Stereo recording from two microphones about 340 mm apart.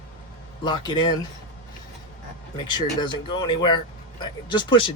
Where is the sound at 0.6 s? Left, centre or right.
Centre.